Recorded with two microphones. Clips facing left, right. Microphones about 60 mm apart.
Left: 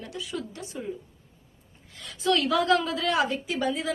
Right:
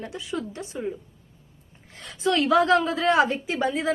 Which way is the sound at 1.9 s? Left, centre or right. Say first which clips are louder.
Right 2 dB; right.